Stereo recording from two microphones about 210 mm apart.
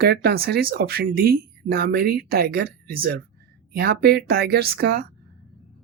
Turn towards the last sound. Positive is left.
turn(degrees=-50)  # may be behind; listen again after turning